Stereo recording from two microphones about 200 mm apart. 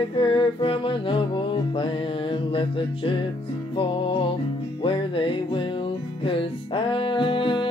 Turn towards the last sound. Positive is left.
turn(degrees=25)  # may be behind; listen again after turning